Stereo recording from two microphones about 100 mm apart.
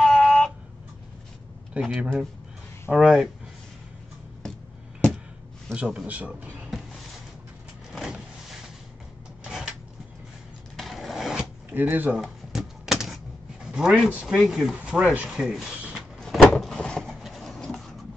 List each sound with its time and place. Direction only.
0.0 s a sound: 5° left (ahead or behind)
1.8 s speech: 5° right (ahead or behind)
5.7 s a man's voice: 10° right (ahead or behind)
7.9 s vehicle: centre (ahead or behind)
9.4 s cash register: 10° right (ahead or behind)
10.8 s a sound: centre (ahead or behind)
11.7 s speech: 20° right (ahead or behind)
12.2 s typewriter: 5° right (ahead or behind)
13.7 s a man's voice: 10° right (ahead or behind)
15.2 s a sound: centre (ahead or behind)